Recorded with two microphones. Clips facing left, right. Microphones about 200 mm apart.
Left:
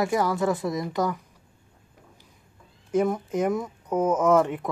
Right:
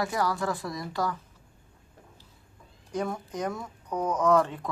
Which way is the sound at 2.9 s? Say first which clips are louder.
Left 8 dB; 20° left (ahead or behind).